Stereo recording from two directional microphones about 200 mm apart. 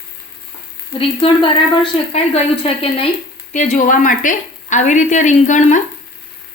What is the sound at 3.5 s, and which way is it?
A woman's voice, 40° left (ahead or behind).